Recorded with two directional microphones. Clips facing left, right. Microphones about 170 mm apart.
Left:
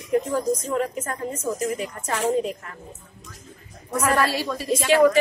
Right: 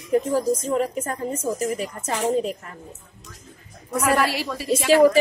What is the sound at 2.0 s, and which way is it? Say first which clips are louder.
Speech: even; 30° right (ahead or behind).